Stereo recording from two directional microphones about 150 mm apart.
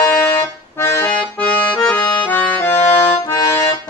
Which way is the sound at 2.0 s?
30° left (ahead or behind).